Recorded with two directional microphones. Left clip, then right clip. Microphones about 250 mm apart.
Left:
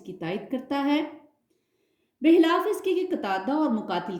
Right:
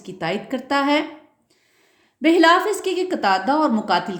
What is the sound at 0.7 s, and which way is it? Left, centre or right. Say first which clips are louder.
Speech: right 7 dB; right.